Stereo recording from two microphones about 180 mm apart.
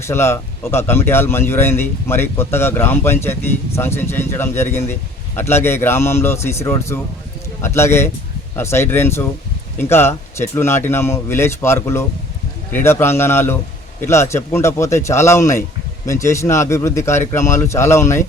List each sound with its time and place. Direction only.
0.0 s speech: 15° left (ahead or behind)